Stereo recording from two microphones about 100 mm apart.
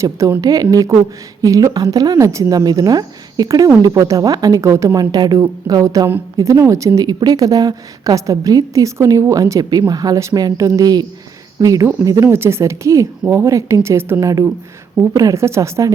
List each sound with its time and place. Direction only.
0.0 s a woman's voice: 30° right (ahead or behind)
4.9 s a woman's voice: 40° right (ahead or behind)